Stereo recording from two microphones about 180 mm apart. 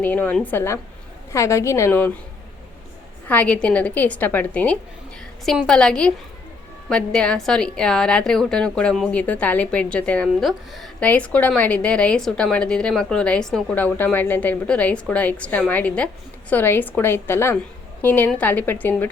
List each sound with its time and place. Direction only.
0.0 s a woman's voice: 10° left (ahead or behind)
3.2 s a woman's voice: 10° left (ahead or behind)